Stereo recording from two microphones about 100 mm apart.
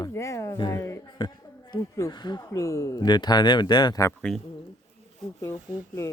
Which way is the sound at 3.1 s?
45° left (ahead or behind).